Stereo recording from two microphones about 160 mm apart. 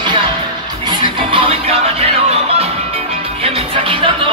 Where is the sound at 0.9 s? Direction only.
30° right (ahead or behind).